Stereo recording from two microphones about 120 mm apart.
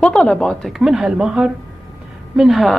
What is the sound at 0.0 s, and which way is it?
Speech, 5° left (ahead or behind).